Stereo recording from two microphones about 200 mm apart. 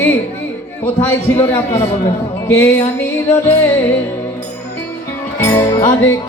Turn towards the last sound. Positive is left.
turn(degrees=15)  # may be behind; listen again after turning